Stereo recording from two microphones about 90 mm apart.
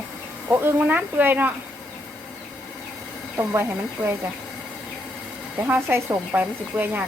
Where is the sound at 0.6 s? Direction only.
20° right (ahead or behind).